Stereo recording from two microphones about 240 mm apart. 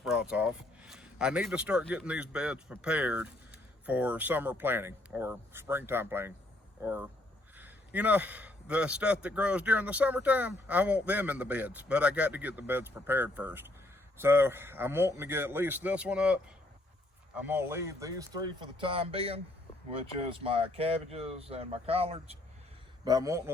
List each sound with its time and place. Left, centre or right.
0.0 s speech: centre
7.5 s a sound: centre
9.2 s speech: centre; by 19.4 s right
20.4 s speech: right
23.0 s speech: centre